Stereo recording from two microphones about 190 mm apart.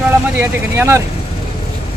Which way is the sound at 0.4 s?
10° right (ahead or behind).